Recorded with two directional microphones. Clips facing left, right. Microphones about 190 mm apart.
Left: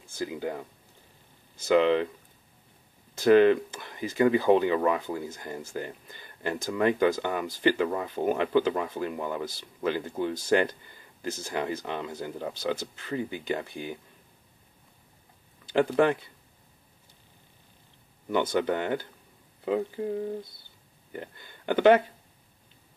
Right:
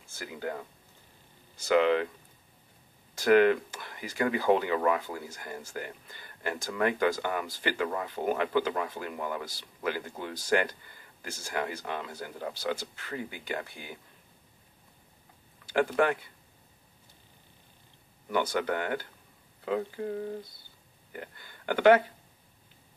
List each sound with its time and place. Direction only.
0.2 s speech: 15° left (ahead or behind)
3.2 s speech: 20° left (ahead or behind)
15.6 s speech: 20° left (ahead or behind)
18.3 s speech: 20° left (ahead or behind)
21.1 s speech: 20° left (ahead or behind)